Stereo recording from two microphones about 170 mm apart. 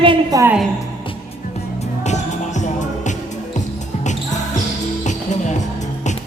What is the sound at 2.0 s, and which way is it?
Music, 40° left (ahead or behind).